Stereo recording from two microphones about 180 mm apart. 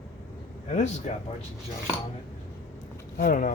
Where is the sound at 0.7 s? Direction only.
40° left (ahead or behind).